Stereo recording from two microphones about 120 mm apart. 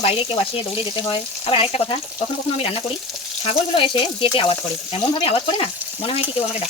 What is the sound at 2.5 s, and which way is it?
Frying, 60° left (ahead or behind).